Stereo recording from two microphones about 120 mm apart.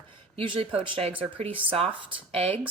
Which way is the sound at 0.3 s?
50° right (ahead or behind).